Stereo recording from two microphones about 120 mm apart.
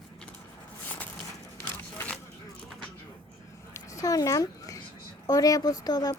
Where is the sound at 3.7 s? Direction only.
30° left (ahead or behind).